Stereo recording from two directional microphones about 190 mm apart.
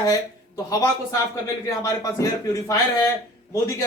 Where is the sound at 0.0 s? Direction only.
20° left (ahead or behind).